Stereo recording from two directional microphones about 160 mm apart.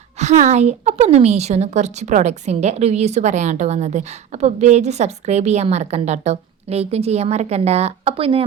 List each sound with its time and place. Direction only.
0.2 s a woman's voice: 45° right (ahead or behind)